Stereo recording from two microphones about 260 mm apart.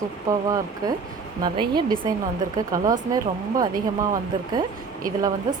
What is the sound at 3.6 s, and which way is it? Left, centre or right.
Speech, centre.